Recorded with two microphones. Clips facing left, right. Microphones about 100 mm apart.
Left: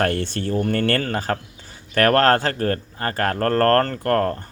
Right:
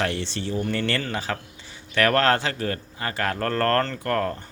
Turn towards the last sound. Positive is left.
turn(degrees=45)  # may be behind; listen again after turning